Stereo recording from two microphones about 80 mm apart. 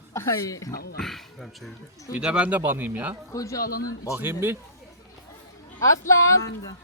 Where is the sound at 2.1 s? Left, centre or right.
Centre.